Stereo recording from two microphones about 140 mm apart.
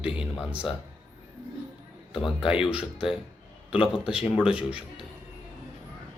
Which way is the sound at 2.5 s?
5° right (ahead or behind).